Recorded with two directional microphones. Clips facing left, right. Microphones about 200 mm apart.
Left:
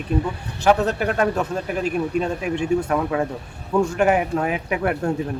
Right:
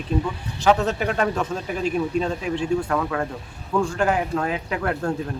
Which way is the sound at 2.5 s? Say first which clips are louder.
Left 3 dB; 15° left (ahead or behind).